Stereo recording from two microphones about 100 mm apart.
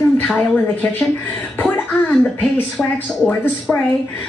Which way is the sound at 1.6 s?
10° left (ahead or behind).